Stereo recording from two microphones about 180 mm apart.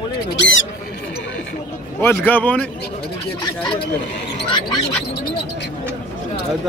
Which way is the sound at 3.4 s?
25° left (ahead or behind).